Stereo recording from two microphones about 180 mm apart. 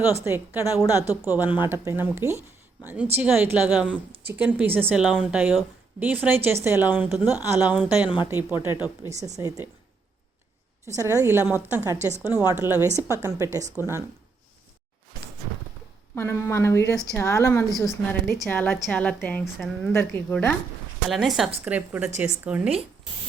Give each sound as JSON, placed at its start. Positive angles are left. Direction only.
{"t": 0.3, "sound": "a woman's voice", "side_deg": -10}
{"t": 10.9, "sound": "a woman's voice", "side_deg": -15}
{"t": 16.1, "sound": "a woman's voice", "side_deg": 15}
{"t": 17.7, "sound": "a woman's voice", "side_deg": 0}